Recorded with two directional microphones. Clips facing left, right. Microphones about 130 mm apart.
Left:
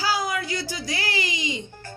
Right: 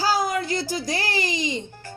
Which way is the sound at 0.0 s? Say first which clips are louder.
Right 3 dB; 45° right (ahead or behind).